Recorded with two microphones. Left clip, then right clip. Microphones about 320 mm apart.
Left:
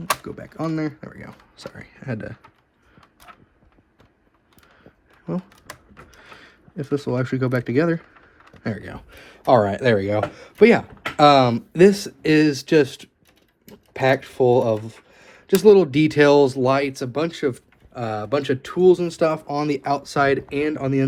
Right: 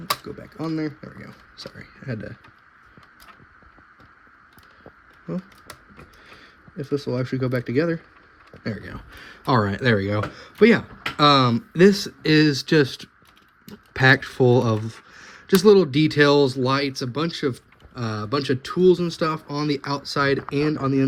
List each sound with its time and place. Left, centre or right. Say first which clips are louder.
0.3 s speech: left 3 dB; left
0.7 s speech: left 1 dB; centre
6.1 s speech: left 1 dB; centre
9.0 s speech: left 7 dB; centre
20.5 s speech: even; centre